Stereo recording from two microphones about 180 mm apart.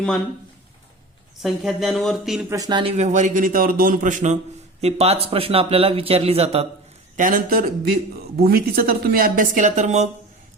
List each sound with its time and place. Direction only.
1.4 s speech: centre (ahead or behind)
2.5 s speech: 20° right (ahead or behind)
7.2 s speech: 50° right (ahead or behind)